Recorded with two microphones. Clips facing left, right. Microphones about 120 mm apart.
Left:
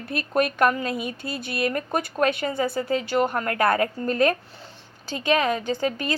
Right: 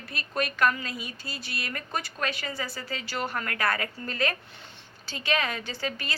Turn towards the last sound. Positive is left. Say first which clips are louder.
# left 9 dB
turn(degrees=45)  # may be behind; listen again after turning